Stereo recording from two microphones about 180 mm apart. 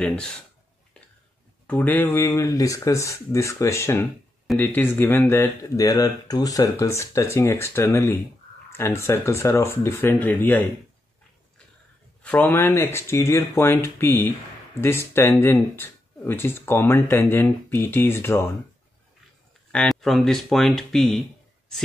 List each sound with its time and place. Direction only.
0.0 s speech: 5° left (ahead or behind)
1.7 s speech: 10° left (ahead or behind)
12.2 s speech: 10° left (ahead or behind)
19.7 s speech: 5° left (ahead or behind)